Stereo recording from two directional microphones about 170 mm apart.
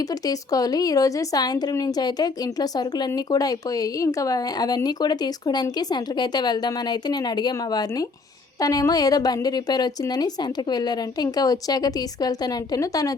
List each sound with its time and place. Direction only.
0.3 s a woman's voice: 20° left (ahead or behind)